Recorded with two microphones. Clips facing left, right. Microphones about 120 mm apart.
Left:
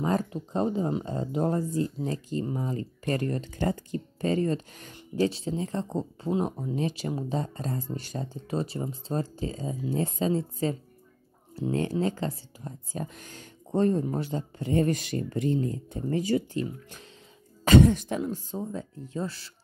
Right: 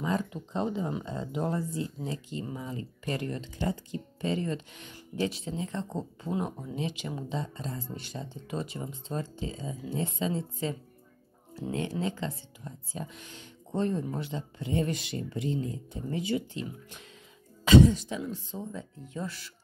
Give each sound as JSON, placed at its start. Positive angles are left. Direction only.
{"t": 0.0, "sound": "speech", "side_deg": 45}
{"t": 6.7, "sound": "speech", "side_deg": 40}
{"t": 17.6, "sound": "speech", "side_deg": 55}